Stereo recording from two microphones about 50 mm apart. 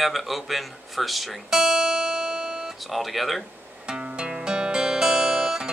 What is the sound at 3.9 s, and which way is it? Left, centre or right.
Music, right.